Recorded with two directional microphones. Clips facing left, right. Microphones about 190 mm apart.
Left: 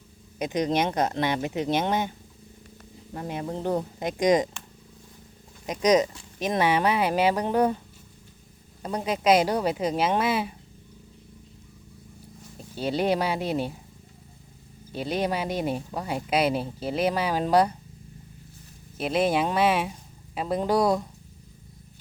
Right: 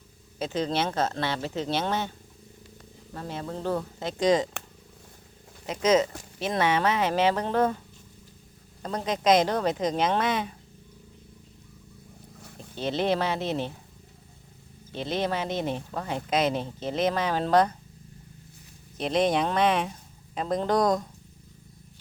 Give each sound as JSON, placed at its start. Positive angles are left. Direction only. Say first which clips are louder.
{"t": 0.3, "sound": "speech", "louder": "left 3 dB", "side_deg": 15}
{"t": 5.6, "sound": "speech", "louder": "left 1 dB", "side_deg": 15}
{"t": 8.8, "sound": "speech", "louder": "left 1 dB", "side_deg": 10}
{"t": 12.7, "sound": "speech", "louder": "left 1 dB", "side_deg": 10}
{"t": 14.9, "sound": "speech", "louder": "left 1 dB", "side_deg": 10}
{"t": 18.9, "sound": "speech", "louder": "even", "side_deg": 5}